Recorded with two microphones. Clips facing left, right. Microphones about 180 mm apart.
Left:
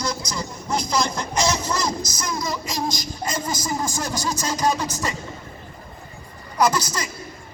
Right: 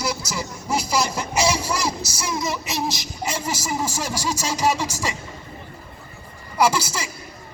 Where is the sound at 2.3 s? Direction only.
25° right (ahead or behind).